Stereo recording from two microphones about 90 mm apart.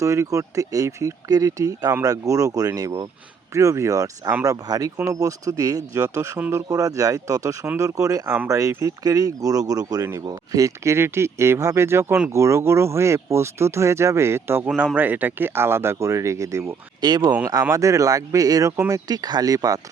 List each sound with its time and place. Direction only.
0.0 s speech: 35° right (ahead or behind)
17.0 s speech: 50° right (ahead or behind)
17.5 s speech: 40° right (ahead or behind)